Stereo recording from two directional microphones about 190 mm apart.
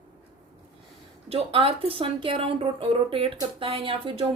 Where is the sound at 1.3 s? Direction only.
30° right (ahead or behind).